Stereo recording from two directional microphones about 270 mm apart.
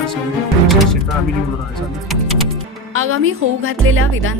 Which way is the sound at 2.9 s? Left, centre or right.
Right.